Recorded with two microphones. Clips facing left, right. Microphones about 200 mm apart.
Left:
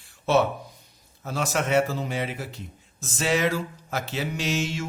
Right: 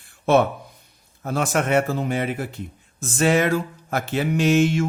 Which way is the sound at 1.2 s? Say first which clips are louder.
Right 5 dB; 55° right (ahead or behind).